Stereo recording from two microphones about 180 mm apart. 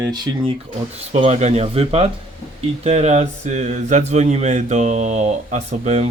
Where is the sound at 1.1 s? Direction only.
35° right (ahead or behind).